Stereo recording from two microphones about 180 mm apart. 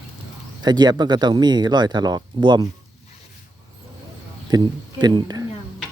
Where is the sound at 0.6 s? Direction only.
25° right (ahead or behind).